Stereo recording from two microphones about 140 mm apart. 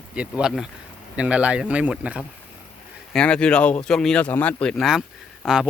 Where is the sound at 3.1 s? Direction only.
5° left (ahead or behind).